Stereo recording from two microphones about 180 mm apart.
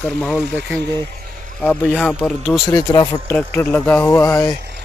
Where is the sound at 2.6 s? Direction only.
20° left (ahead or behind).